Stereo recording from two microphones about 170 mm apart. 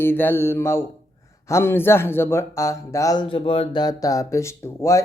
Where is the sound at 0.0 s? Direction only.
10° left (ahead or behind).